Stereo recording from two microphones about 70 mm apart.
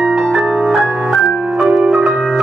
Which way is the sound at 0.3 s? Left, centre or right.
Centre.